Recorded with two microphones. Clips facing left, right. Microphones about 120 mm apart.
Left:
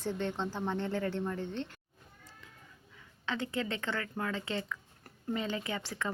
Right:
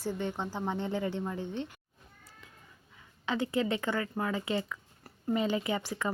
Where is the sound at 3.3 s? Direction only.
15° right (ahead or behind).